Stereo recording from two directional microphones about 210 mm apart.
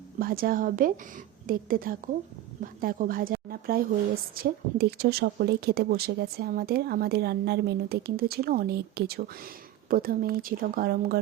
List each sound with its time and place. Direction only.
0.2 s speech: 45° right (ahead or behind)